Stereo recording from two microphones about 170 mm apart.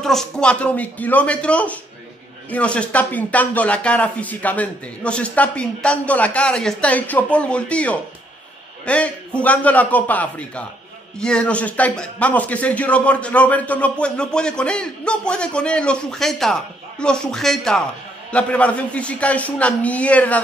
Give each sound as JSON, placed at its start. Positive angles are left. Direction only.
{"t": 0.0, "sound": "a man's voice", "side_deg": 0}